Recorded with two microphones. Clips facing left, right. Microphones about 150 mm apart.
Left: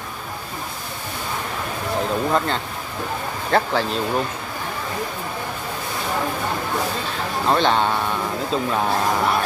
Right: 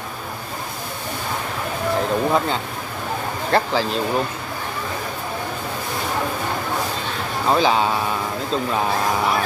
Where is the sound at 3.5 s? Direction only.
Centre (ahead or behind).